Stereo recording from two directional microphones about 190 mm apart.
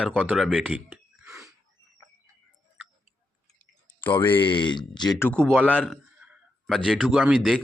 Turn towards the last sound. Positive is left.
turn(degrees=0)  # may be behind; listen again after turning